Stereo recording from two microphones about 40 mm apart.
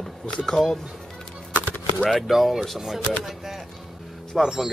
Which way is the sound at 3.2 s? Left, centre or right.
Centre.